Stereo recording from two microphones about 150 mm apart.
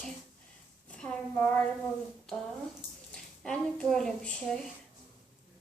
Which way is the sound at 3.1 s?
5° left (ahead or behind).